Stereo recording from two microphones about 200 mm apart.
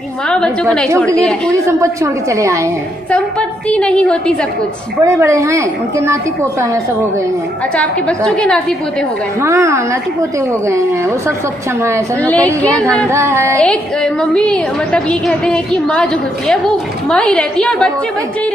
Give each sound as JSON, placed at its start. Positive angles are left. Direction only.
{"t": 0.3, "sound": "a woman's voice", "side_deg": 0}
{"t": 1.5, "sound": "a woman's voice", "side_deg": -15}
{"t": 3.1, "sound": "a woman's voice", "side_deg": 5}
{"t": 5.0, "sound": "a woman's voice", "side_deg": -15}
{"t": 7.7, "sound": "a woman's voice", "side_deg": 5}
{"t": 9.4, "sound": "a woman's voice", "side_deg": -15}
{"t": 12.2, "sound": "a woman's voice", "side_deg": 5}
{"t": 13.1, "sound": "a woman's voice", "side_deg": -15}
{"t": 13.6, "sound": "a woman's voice", "side_deg": 5}